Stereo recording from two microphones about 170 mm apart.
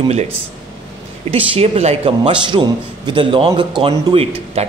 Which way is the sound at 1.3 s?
35° right (ahead or behind).